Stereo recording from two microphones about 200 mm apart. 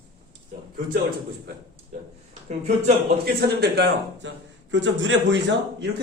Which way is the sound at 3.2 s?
55° right (ahead or behind).